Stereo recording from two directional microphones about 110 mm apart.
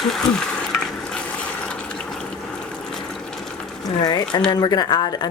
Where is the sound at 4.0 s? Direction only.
40° left (ahead or behind).